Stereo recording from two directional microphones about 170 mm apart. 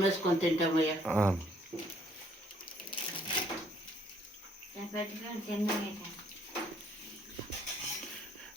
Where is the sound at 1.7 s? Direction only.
20° right (ahead or behind).